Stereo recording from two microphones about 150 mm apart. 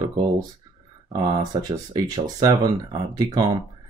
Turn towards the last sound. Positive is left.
turn(degrees=-25)  # may be behind; listen again after turning